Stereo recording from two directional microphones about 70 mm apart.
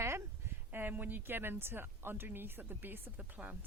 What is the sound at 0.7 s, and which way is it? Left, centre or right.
A woman's voice, right.